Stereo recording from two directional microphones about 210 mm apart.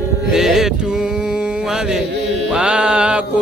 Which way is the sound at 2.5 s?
5° right (ahead or behind).